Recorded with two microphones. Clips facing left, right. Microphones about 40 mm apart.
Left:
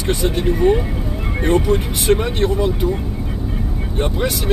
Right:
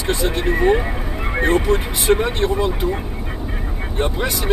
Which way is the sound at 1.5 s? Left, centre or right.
Centre.